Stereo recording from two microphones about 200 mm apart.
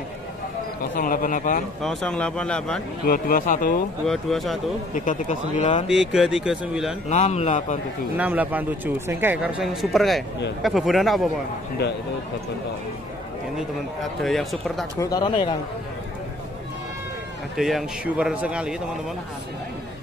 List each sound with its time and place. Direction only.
0.9 s speech: 45° left (ahead or behind)
1.8 s a man's voice: centre (ahead or behind)
3.1 s speech: 45° left (ahead or behind)
4.0 s a man's voice: centre (ahead or behind)
4.9 s speech: 40° left (ahead or behind)
5.9 s a man's voice: centre (ahead or behind)
7.1 s speech: 35° left (ahead or behind)
8.2 s a man's voice: 10° right (ahead or behind)
14.2 s a man's voice: centre (ahead or behind)
15.0 s speech: 20° left (ahead or behind)
17.6 s a man's voice: centre (ahead or behind)